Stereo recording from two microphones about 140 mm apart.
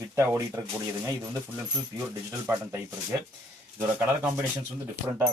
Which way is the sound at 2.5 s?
20° right (ahead or behind).